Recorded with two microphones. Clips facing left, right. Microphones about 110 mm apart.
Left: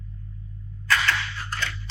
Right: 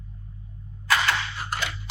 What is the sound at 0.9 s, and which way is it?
Cap gun, 20° right (ahead or behind).